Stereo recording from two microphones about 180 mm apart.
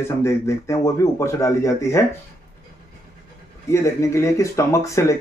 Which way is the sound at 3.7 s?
15° left (ahead or behind).